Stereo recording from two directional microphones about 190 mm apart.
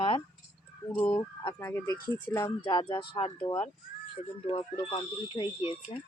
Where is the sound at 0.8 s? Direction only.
10° left (ahead or behind).